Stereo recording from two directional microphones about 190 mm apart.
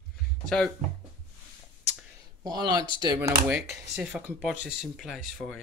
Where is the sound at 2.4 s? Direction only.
20° right (ahead or behind).